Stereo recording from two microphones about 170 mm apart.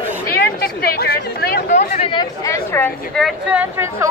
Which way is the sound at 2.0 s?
30° left (ahead or behind).